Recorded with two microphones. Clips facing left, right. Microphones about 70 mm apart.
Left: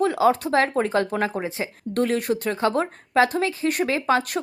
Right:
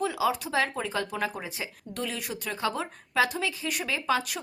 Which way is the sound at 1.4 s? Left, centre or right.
Left.